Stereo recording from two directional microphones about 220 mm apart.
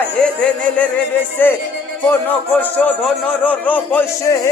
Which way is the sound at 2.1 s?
5° left (ahead or behind).